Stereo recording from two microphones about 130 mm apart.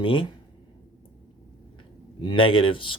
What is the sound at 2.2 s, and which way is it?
Speech, 40° left (ahead or behind).